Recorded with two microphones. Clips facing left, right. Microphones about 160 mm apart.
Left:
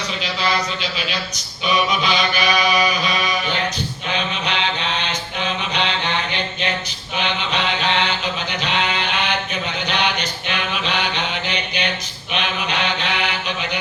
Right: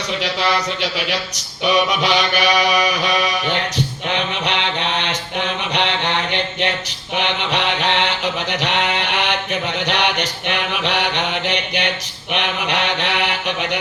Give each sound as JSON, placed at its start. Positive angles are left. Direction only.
{"t": 0.2, "sound": "mantra", "side_deg": -70}
{"t": 7.2, "sound": "a sound", "side_deg": -65}
{"t": 9.8, "sound": "mantra", "side_deg": -70}